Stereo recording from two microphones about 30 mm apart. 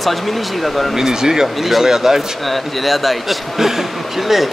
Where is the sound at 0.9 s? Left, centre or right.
Centre.